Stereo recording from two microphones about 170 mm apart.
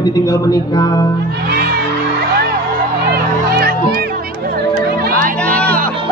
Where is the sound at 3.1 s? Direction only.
65° right (ahead or behind).